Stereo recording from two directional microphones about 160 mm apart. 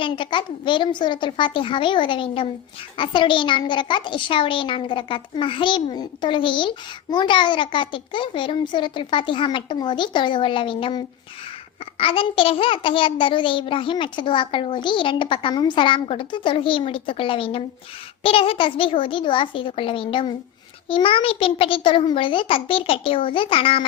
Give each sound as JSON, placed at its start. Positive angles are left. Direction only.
{"t": 0.0, "sound": "a child's voice", "side_deg": 30}